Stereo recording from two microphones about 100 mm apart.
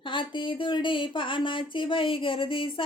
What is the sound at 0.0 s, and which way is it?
Speech, 55° left (ahead or behind).